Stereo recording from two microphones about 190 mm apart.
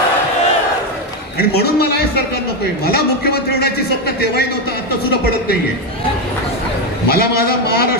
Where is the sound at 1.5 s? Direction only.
55° left (ahead or behind).